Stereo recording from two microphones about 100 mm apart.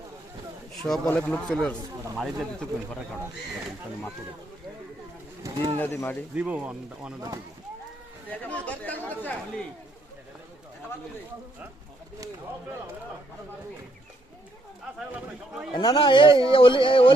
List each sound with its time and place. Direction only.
0.7 s a sound: 5° left (ahead or behind)
1.1 s speech: 15° left (ahead or behind)
2.1 s speech: 5° right (ahead or behind)
5.7 s speech: 20° left (ahead or behind)
6.3 s speech: 10° right (ahead or behind)
8.3 s speech: 15° left (ahead or behind)
14.9 s a sound: 5° right (ahead or behind)
15.7 s a man's voice: 60° left (ahead or behind)